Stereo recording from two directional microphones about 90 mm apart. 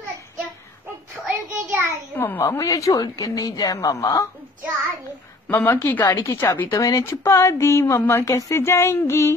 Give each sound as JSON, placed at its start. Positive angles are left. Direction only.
{"t": 1.2, "sound": "child singing", "side_deg": -20}
{"t": 2.1, "sound": "a woman's voice", "side_deg": 25}
{"t": 2.4, "sound": "speech", "side_deg": 35}
{"t": 5.5, "sound": "speech", "side_deg": 25}